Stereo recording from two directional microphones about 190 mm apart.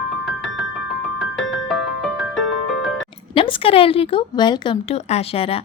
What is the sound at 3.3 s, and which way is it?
A woman's voice, 25° left (ahead or behind).